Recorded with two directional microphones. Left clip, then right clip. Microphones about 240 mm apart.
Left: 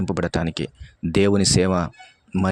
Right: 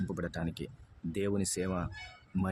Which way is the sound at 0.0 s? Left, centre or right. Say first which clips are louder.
Left 14 dB; left.